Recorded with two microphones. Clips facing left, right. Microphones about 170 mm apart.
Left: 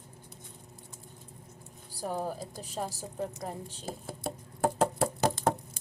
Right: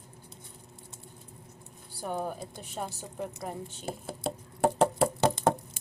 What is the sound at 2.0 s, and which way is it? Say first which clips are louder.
A woman's voice: even; 35° left (ahead or behind).